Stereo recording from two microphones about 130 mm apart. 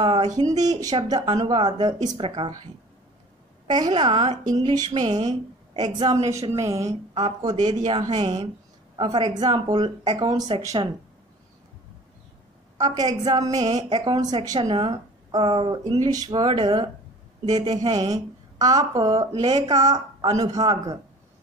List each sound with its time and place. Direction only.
0.0 s a sound: 40° right (ahead or behind)
0.3 s a woman's voice: 25° right (ahead or behind)
3.6 s a woman's voice: 35° right (ahead or behind)
7.6 s a woman's voice: 35° right (ahead or behind)
12.7 s a woman's voice: 30° right (ahead or behind)
15.7 s a woman's voice: 30° right (ahead or behind)